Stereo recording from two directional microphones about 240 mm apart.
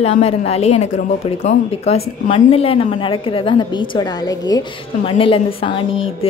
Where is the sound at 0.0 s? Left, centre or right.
Left.